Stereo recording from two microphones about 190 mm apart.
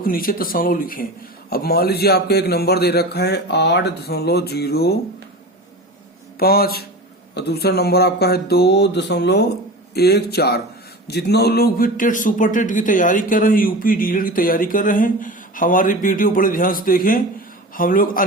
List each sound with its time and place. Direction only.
0.0 s a man's voice: 50° left (ahead or behind)
6.4 s a man's voice: 50° left (ahead or behind)